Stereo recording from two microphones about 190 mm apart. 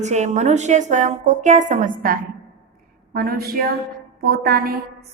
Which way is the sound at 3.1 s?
50° right (ahead or behind).